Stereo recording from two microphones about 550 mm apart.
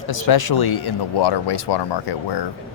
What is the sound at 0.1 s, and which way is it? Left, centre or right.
Speech, left.